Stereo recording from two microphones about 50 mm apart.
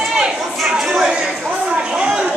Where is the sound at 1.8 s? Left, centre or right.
Centre.